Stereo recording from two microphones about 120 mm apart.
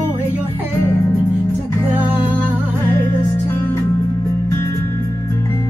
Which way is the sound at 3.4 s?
20° left (ahead or behind).